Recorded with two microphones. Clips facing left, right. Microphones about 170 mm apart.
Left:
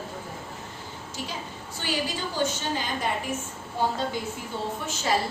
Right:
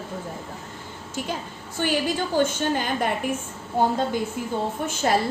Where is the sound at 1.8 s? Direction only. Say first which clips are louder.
Right 6 dB; 55° right (ahead or behind).